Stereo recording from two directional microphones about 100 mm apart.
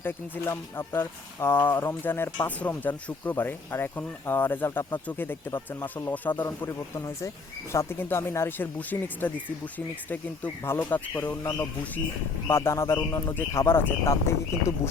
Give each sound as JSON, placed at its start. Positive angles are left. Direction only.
{"t": 0.0, "sound": "speech", "side_deg": 25}